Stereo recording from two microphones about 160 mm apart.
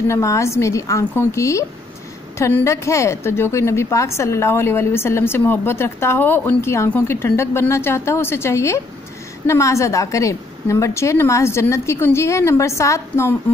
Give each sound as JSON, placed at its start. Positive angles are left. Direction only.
{"t": 0.1, "sound": "a woman's voice", "side_deg": 20}